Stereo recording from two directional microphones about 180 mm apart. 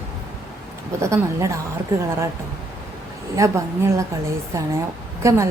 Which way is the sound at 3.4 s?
15° right (ahead or behind).